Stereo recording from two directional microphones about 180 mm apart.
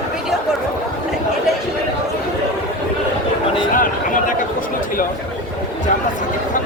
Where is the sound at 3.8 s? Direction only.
50° left (ahead or behind).